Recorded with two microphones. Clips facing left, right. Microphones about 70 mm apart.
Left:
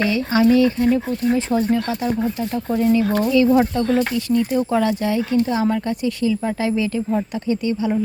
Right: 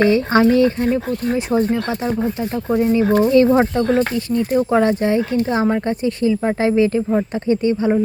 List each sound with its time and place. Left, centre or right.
0.0 s speech: right
2.6 s speech: right
3.2 s speech: right